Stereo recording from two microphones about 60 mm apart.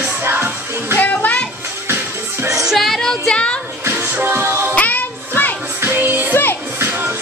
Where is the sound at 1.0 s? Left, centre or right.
Left.